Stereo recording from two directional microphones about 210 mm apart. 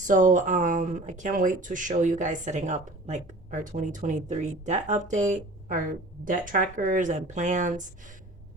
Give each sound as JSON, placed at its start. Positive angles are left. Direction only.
{"t": 0.0, "sound": "speech", "side_deg": -35}